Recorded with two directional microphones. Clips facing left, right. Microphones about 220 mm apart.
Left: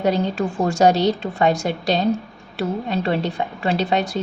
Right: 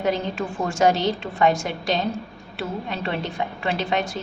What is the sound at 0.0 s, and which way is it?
A woman's voice, 35° left (ahead or behind).